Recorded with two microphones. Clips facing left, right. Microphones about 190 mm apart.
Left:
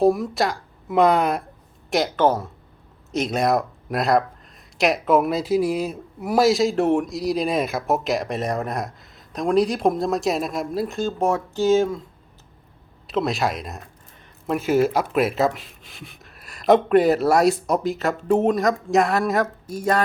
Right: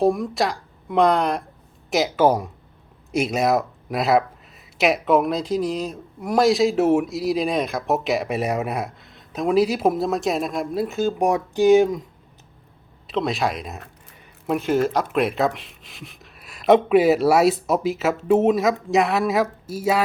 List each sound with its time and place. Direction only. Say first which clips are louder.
0.0 s speech: left 1 dB; centre (ahead or behind)
11.2 s speech: right 2 dB; 15° right (ahead or behind)
13.1 s speech: even; centre (ahead or behind)